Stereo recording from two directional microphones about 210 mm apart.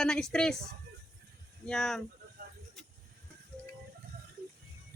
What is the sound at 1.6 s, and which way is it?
Speech, centre (ahead or behind).